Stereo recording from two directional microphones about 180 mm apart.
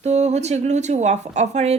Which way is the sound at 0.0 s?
40° right (ahead or behind).